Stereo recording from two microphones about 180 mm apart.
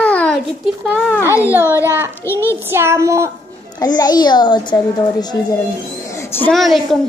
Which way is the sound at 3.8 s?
20° left (ahead or behind).